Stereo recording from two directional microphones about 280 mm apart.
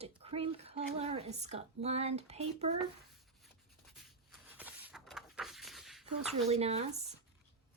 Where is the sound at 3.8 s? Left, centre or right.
Centre.